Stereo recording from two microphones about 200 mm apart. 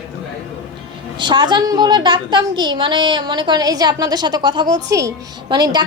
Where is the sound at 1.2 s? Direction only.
25° right (ahead or behind).